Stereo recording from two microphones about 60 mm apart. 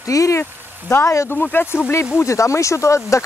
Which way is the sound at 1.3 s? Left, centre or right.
Left.